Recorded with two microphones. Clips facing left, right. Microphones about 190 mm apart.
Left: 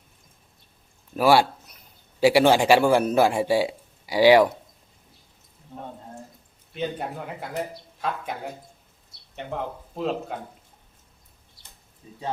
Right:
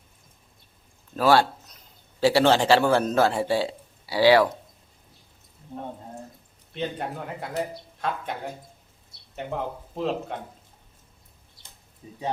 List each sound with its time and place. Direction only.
1.1 s a sound: 10° left (ahead or behind)
2.2 s speech: 10° left (ahead or behind)
5.7 s speech: 15° right (ahead or behind)
6.7 s speech: 5° left (ahead or behind)
9.3 s speech: centre (ahead or behind)
12.0 s speech: 15° right (ahead or behind)